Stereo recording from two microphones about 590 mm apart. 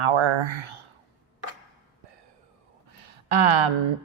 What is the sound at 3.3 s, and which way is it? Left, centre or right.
Speech, right.